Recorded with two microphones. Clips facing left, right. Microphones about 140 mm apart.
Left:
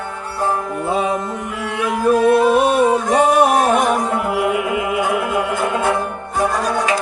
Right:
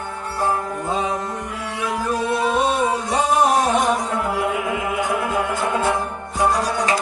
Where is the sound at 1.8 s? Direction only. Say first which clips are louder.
Left 9 dB; 60° left (ahead or behind).